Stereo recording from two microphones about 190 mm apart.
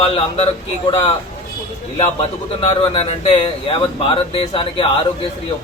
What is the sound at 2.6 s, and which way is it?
Speech, 30° left (ahead or behind).